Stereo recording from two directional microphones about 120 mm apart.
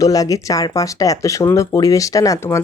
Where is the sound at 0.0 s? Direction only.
30° left (ahead or behind).